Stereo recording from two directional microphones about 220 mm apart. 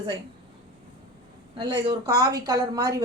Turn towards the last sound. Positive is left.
turn(degrees=-15)  # may be behind; listen again after turning